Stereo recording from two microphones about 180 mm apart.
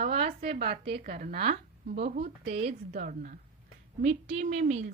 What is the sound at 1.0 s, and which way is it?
Speech, 50° right (ahead or behind).